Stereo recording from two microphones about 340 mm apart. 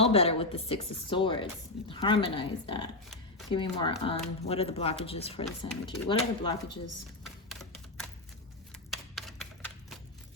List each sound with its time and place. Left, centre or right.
0.0 s speech: centre
7.3 s typing: centre
8.9 s typewriter: centre